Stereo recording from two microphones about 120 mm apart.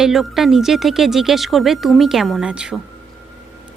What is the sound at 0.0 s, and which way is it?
Speech, centre (ahead or behind).